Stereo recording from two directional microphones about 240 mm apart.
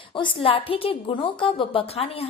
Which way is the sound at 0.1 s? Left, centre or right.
Left.